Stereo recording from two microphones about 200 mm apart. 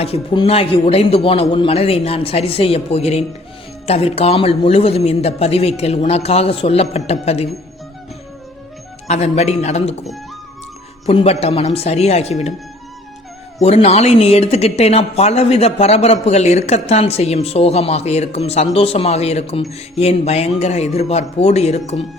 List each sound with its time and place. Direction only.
0.0 s a man's voice: 30° left (ahead or behind)
9.0 s speech: 35° left (ahead or behind)
11.0 s speech: 30° left (ahead or behind)
13.6 s speech: 30° left (ahead or behind)